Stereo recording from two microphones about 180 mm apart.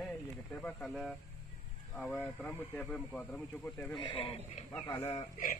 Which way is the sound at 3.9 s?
30° left (ahead or behind).